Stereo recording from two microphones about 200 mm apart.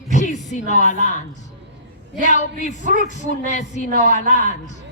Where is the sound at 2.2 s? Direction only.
40° left (ahead or behind).